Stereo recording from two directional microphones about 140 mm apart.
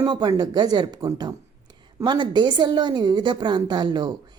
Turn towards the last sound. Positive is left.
turn(degrees=-30)  # may be behind; listen again after turning